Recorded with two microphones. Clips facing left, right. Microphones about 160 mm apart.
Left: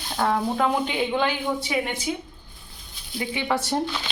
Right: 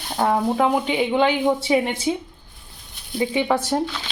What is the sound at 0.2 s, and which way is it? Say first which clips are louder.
Speech: right 4 dB; 15° right (ahead or behind).